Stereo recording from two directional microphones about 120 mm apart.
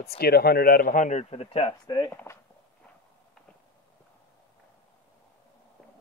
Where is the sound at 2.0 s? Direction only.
25° left (ahead or behind).